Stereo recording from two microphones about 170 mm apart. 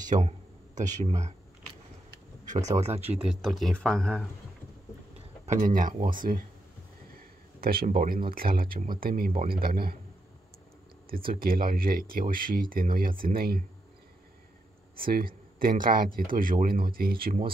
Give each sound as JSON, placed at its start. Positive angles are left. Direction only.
{"t": 0.0, "sound": "speech", "side_deg": -45}
{"t": 2.4, "sound": "a sound", "side_deg": -45}
{"t": 2.8, "sound": "speech", "side_deg": -40}
{"t": 3.2, "sound": "speech", "side_deg": 0}
{"t": 5.5, "sound": "speech", "side_deg": -50}
{"t": 7.6, "sound": "speech", "side_deg": -60}
{"t": 11.1, "sound": "speech", "side_deg": -60}
{"t": 15.0, "sound": "speech", "side_deg": -60}